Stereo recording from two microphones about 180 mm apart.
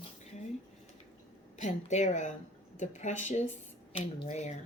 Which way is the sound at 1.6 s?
40° left (ahead or behind).